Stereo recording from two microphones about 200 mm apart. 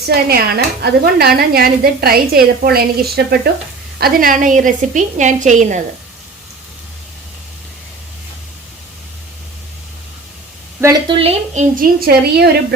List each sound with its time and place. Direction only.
0.0 s a woman's voice: 50° right (ahead or behind)
11.1 s a woman's voice: 30° right (ahead or behind)
11.8 s a woman's voice: 50° right (ahead or behind)